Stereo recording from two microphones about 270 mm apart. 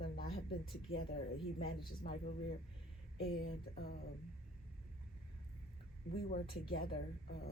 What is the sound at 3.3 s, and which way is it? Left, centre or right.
Speech, left.